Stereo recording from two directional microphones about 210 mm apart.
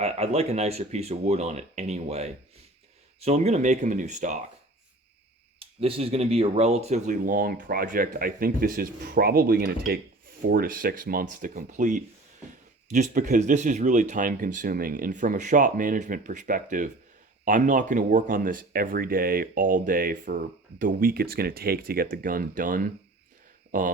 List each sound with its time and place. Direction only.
0.0 s speech: 30° right (ahead or behind)
5.5 s speech: 25° right (ahead or behind)